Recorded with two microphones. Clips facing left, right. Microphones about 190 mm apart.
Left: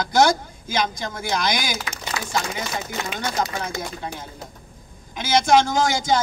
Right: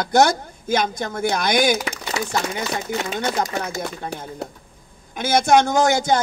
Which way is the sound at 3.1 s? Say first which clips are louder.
Right 1 dB; 45° right (ahead or behind).